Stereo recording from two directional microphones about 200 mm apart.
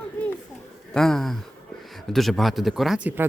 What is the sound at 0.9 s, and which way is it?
Speech, centre (ahead or behind).